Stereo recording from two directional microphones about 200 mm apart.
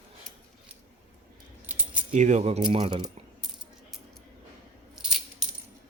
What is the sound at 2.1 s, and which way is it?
Speech, 35° right (ahead or behind).